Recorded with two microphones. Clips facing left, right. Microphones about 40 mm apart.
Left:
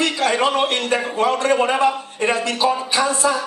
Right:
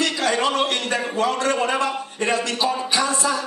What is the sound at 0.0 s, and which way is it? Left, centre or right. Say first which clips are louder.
A man's voice: left 3 dB; centre.